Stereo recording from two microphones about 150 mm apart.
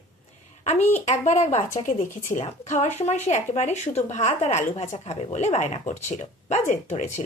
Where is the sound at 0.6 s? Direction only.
50° left (ahead or behind).